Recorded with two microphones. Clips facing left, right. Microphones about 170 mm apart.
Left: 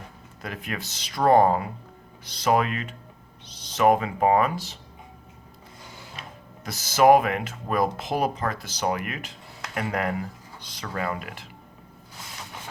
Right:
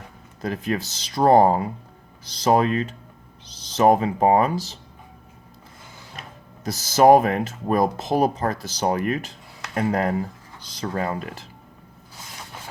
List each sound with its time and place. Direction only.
0.4 s speech: 35° right (ahead or behind)
6.7 s speech: 40° right (ahead or behind)